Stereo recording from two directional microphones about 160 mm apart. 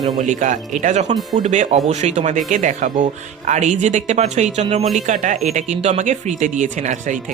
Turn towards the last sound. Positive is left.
turn(degrees=-50)  # may be behind; listen again after turning